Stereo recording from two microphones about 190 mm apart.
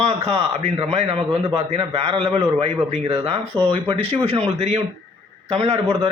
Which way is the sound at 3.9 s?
30° right (ahead or behind).